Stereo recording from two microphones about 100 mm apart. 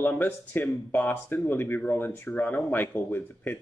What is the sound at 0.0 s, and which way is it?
Speech, 20° left (ahead or behind).